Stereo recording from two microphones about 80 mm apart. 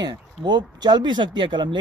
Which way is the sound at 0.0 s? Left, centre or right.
Right.